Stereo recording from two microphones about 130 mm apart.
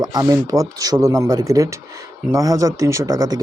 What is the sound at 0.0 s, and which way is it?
Speech, 30° right (ahead or behind).